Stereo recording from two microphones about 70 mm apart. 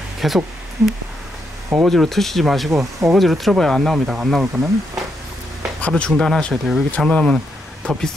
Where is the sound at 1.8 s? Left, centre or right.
Centre.